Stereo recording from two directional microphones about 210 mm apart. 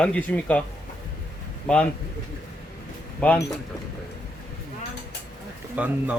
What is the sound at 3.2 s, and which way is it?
Speech, 5° left (ahead or behind).